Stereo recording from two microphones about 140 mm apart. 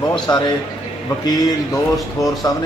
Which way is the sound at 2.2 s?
25° left (ahead or behind).